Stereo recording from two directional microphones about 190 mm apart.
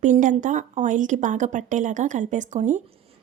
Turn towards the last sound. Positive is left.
turn(degrees=-35)  # may be behind; listen again after turning